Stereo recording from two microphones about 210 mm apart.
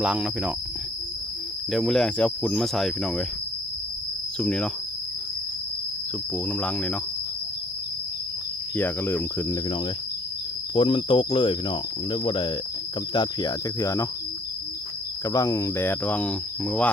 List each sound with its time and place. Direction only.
0.0 s speech: 5° right (ahead or behind)
1.7 s speech: centre (ahead or behind)
4.4 s speech: 5° left (ahead or behind)
6.3 s speech: 5° left (ahead or behind)
8.7 s speech: 10° left (ahead or behind)
10.8 s cricket: 25° left (ahead or behind)
13.1 s speech: 15° left (ahead or behind)
15.3 s speech: 15° left (ahead or behind)